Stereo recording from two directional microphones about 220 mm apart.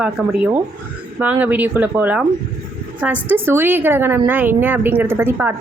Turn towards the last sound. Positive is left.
turn(degrees=-10)  # may be behind; listen again after turning